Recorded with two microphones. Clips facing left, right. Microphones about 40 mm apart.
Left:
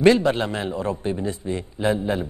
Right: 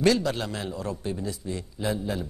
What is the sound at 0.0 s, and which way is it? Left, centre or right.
Speech, left.